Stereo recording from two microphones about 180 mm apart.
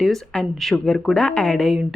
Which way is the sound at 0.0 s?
Centre (ahead or behind).